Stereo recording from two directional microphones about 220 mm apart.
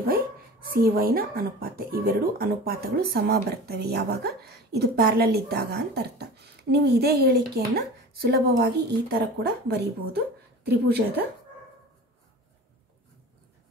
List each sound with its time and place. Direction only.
0.0 s speech: 40° right (ahead or behind)